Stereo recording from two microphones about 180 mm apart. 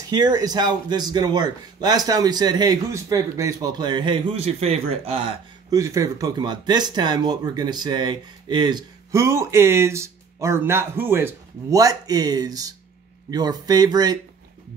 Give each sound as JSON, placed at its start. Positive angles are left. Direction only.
{"t": 0.1, "sound": "speech", "side_deg": -20}
{"t": 5.8, "sound": "speech", "side_deg": -20}